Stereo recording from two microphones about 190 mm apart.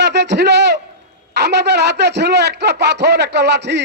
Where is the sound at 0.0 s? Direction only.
65° right (ahead or behind).